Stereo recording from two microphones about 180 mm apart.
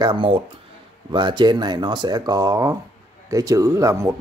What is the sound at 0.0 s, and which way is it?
Speech, 25° right (ahead or behind).